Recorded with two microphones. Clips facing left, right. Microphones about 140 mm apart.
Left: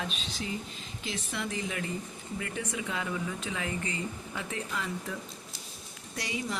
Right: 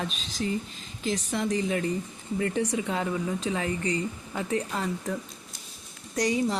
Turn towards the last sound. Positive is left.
turn(degrees=-40)  # may be behind; listen again after turning